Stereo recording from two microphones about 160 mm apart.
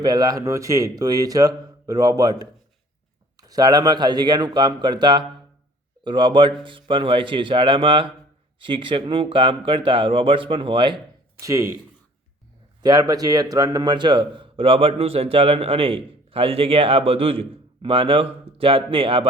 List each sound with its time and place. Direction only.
0.0 s speech: 25° right (ahead or behind)
12.8 s speech: 25° right (ahead or behind)